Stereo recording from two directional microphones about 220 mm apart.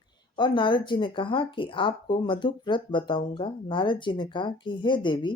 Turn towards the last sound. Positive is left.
turn(degrees=20)  # may be behind; listen again after turning